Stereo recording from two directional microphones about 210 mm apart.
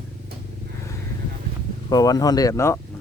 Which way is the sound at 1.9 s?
20° left (ahead or behind).